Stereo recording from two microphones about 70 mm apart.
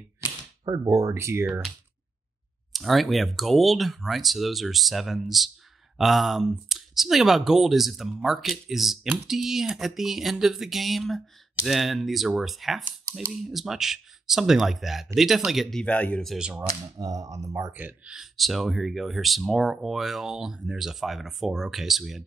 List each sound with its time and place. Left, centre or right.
0.7 s speech: right
2.7 s speech: centre
15.8 s speech: centre
17.0 s speech: right
18.0 s speech: centre